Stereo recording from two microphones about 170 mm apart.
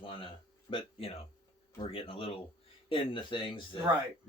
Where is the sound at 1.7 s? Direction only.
30° left (ahead or behind).